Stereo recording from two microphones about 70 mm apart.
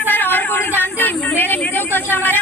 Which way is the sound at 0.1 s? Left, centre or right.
Left.